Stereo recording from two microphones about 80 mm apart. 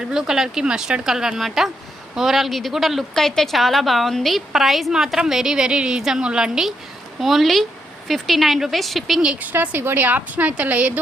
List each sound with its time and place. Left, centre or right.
0.0 s a woman's voice: centre
9.2 s a woman's voice: centre